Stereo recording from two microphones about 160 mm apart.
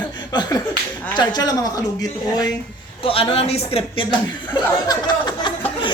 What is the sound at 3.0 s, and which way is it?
Speech, 35° left (ahead or behind).